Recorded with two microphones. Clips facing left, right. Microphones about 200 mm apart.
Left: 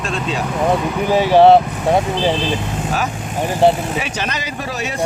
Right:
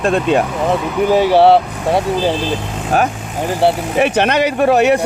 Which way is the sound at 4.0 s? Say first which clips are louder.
Right 11 dB; 60° right (ahead or behind).